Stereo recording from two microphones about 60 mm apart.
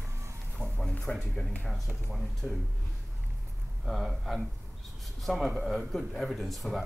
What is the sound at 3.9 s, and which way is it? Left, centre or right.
Speech, centre.